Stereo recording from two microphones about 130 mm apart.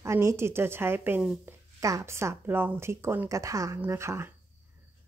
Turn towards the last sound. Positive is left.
turn(degrees=-20)  # may be behind; listen again after turning